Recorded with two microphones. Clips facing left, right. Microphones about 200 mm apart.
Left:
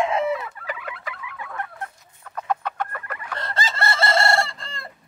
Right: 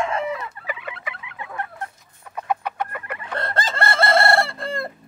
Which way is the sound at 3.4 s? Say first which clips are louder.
Right 3 dB; 55° right (ahead or behind).